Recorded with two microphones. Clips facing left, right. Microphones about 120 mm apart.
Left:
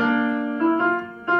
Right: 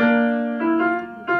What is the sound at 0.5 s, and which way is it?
Music, 25° left (ahead or behind).